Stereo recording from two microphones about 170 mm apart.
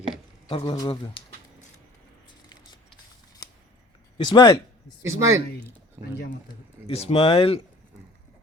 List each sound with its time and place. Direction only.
0.4 s speech: 30° left (ahead or behind)
4.2 s speech: 25° left (ahead or behind)
5.0 s speech: 15° right (ahead or behind)
6.8 s speech: 35° left (ahead or behind)